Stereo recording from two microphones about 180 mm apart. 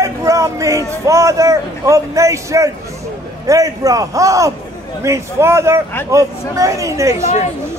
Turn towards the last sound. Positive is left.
turn(degrees=-15)  # may be behind; listen again after turning